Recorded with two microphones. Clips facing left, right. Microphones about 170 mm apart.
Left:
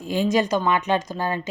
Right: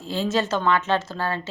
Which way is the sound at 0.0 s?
15° left (ahead or behind).